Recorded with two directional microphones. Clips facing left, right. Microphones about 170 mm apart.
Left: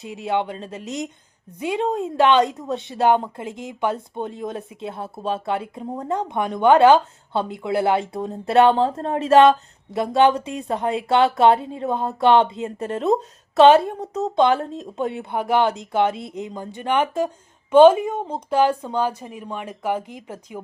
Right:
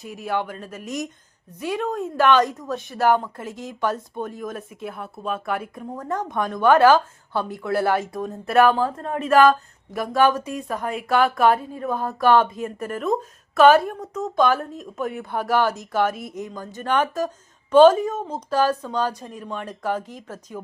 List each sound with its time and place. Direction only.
0.0 s a woman's voice: 25° left (ahead or behind)